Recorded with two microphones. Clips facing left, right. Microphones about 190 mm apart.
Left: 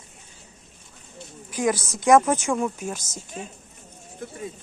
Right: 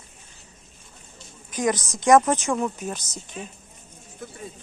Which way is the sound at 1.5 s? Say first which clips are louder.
Even; 5° left (ahead or behind).